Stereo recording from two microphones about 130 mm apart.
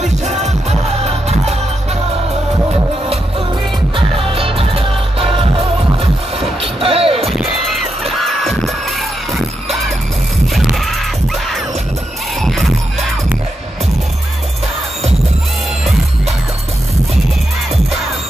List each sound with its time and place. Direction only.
0.2 s music: 60° right (ahead or behind)
3.9 s music: 45° right (ahead or behind)
7.2 s music: centre (ahead or behind)
10.5 s music: centre (ahead or behind)
12.4 s music: centre (ahead or behind)